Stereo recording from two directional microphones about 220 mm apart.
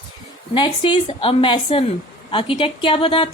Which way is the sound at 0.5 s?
20° left (ahead or behind).